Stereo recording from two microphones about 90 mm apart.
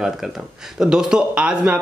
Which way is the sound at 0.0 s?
5° right (ahead or behind).